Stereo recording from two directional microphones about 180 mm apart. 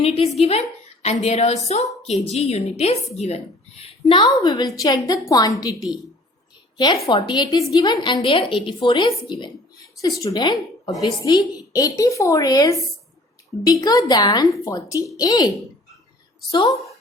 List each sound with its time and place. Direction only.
0.0 s a woman's voice: 35° left (ahead or behind)
6.7 s a woman's voice: 25° left (ahead or behind)